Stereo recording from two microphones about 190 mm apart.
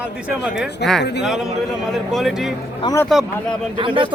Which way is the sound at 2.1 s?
Centre (ahead or behind).